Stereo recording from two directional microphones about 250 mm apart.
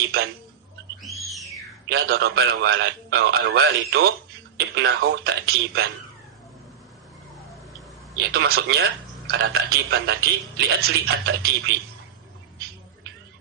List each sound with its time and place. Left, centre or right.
1.0 s music: centre
1.9 s a man's voice: right
8.2 s a man's voice: right